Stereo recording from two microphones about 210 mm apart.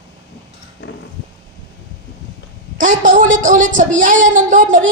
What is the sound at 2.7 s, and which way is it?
A woman's voice, 40° right (ahead or behind).